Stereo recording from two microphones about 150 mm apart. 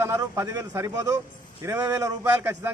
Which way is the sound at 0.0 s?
20° right (ahead or behind).